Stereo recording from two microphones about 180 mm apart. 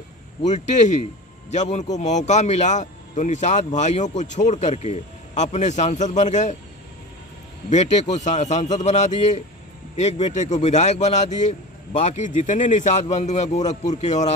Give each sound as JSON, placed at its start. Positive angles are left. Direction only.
{"t": 1.5, "sound": "speech", "side_deg": 40}
{"t": 7.7, "sound": "speech", "side_deg": 40}